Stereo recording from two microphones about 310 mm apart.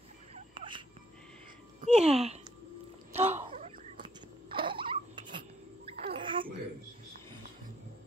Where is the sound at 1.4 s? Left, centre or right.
Right.